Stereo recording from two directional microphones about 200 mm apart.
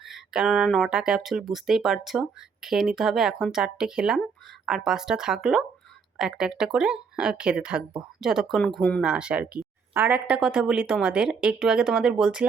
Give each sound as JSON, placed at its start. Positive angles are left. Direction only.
{"t": 0.0, "sound": "speech", "side_deg": 0}